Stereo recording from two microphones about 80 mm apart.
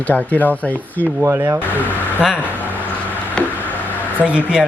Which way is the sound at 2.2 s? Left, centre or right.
Centre.